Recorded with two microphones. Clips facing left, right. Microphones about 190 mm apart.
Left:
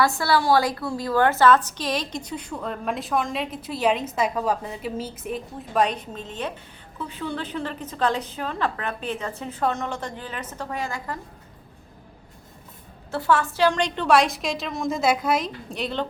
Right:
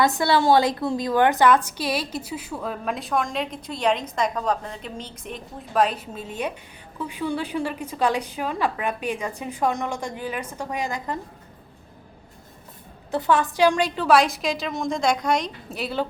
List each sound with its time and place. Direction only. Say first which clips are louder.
0.0 s a woman's voice: right 2 dB; 20° right (ahead or behind)
13.1 s a woman's voice: right 1 dB; 20° right (ahead or behind)